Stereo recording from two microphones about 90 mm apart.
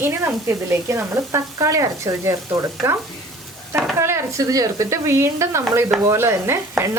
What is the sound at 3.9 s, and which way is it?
Speech, 30° right (ahead or behind).